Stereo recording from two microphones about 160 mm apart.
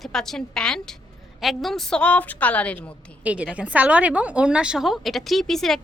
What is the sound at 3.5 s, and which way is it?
A woman's voice, 10° right (ahead or behind).